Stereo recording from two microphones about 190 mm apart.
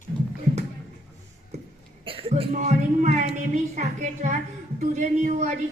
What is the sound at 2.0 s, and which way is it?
Cough, 30° right (ahead or behind).